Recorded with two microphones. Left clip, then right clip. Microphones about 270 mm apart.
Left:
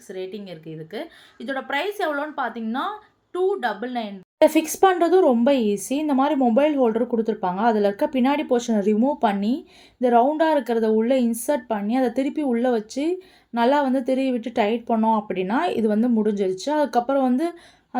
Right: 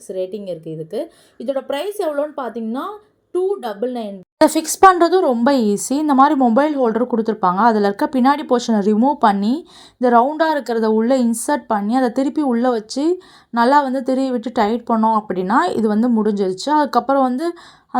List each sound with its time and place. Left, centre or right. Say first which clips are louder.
0.1 s a woman's voice: right 9 dB; centre
4.4 s a woman's voice: right 6 dB; right